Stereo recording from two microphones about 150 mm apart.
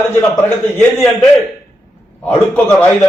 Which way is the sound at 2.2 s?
10° left (ahead or behind).